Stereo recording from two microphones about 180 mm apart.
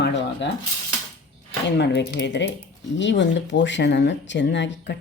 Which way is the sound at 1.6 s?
75° left (ahead or behind).